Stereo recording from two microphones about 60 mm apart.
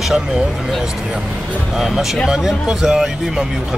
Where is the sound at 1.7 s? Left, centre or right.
Centre.